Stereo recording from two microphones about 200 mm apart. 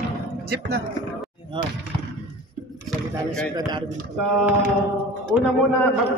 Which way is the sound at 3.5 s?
20° right (ahead or behind).